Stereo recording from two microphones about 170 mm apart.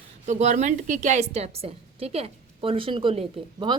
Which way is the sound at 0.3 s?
45° right (ahead or behind).